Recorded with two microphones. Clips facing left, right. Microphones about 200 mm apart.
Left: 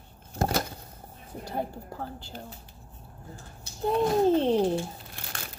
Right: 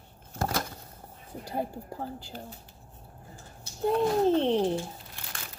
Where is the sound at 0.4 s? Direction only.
25° left (ahead or behind).